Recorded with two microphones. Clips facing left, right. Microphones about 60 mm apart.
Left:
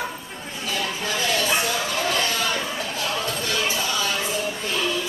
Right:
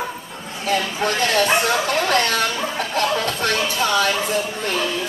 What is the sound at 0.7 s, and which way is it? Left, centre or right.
Speech, right.